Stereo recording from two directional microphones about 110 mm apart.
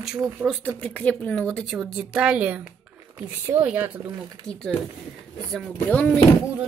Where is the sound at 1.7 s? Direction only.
Centre (ahead or behind); by 3.9 s 20° right (ahead or behind).